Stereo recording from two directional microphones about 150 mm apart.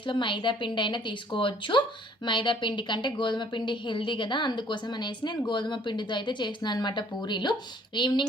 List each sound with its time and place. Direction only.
0.0 s a woman's voice: 35° left (ahead or behind)